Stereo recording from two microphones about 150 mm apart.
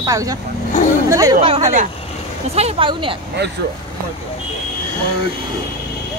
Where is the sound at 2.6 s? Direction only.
40° right (ahead or behind).